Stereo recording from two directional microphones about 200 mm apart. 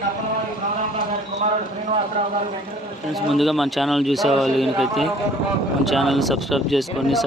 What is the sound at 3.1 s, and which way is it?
A man's voice, centre (ahead or behind).